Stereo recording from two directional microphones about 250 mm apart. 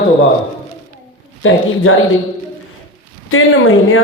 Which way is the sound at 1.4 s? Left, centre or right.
Left.